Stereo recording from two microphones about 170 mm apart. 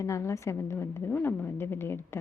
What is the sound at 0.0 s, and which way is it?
A woman's voice, 15° left (ahead or behind).